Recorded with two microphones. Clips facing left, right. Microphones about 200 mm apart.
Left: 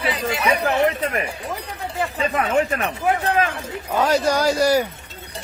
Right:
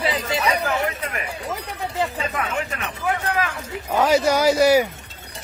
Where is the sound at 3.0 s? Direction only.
25° left (ahead or behind).